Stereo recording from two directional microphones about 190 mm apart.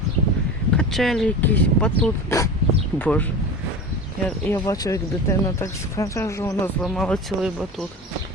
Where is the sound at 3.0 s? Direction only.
10° left (ahead or behind).